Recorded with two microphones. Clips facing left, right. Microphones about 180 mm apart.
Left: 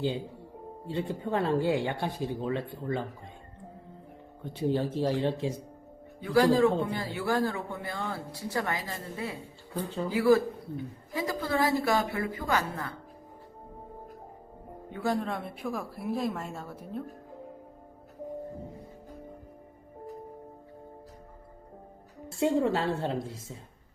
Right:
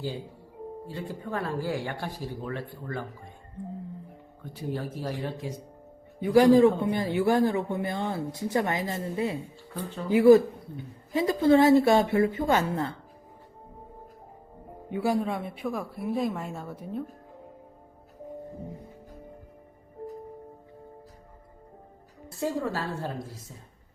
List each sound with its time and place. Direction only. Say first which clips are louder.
0.9 s speech: left 6 dB; 25° left (ahead or behind)
4.4 s speech: left 5 dB; 25° left (ahead or behind)
6.1 s a man's voice: right 5 dB; 15° right (ahead or behind)
14.9 s speech: right 3 dB; 10° right (ahead or behind)
22.3 s speech: left 4 dB; 25° left (ahead or behind)